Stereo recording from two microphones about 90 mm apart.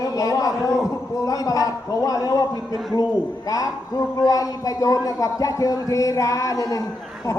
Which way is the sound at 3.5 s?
40° left (ahead or behind).